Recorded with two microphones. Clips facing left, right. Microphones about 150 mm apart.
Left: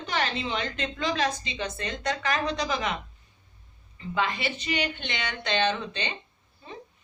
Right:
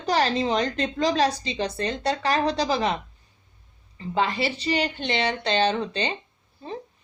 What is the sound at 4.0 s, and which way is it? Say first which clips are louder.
A woman's voice: right 4 dB; 35° right (ahead or behind).